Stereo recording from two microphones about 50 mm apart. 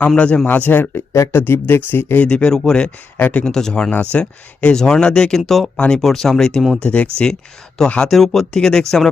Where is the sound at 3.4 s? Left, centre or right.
Centre.